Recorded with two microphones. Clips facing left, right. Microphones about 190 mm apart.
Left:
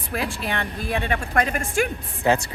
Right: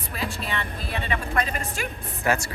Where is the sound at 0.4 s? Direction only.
55° left (ahead or behind).